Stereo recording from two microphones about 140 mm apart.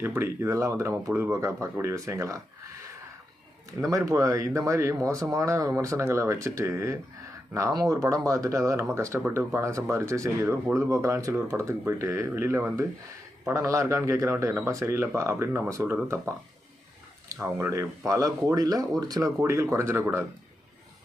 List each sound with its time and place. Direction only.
0.0 s speech: 15° right (ahead or behind)
3.8 s speech: 25° right (ahead or behind)
17.3 s speech: 15° right (ahead or behind)